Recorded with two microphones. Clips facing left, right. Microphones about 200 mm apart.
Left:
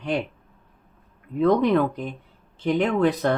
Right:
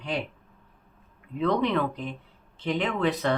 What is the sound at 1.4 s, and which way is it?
Speech, 45° left (ahead or behind).